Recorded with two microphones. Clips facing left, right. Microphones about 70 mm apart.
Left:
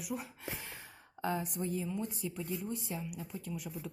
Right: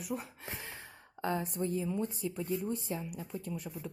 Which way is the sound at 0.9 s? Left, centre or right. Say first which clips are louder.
Right 1 dB; centre.